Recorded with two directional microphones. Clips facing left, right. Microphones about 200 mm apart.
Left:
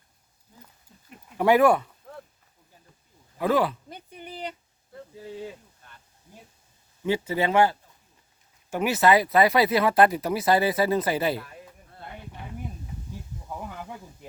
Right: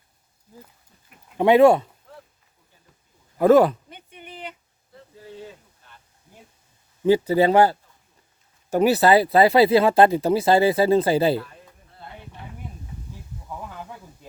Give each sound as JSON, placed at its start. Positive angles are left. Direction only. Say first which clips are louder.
{"t": 1.4, "sound": "speech", "louder": "right 5 dB", "side_deg": -25}
{"t": 3.3, "sound": "speech", "louder": "right 9 dB", "side_deg": -45}
{"t": 3.8, "sound": "a sound", "louder": "left 2 dB", "side_deg": 40}
{"t": 7.0, "sound": "speech", "louder": "right 8 dB", "side_deg": -35}